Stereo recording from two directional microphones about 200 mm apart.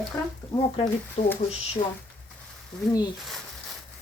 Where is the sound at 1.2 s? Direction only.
35° left (ahead or behind).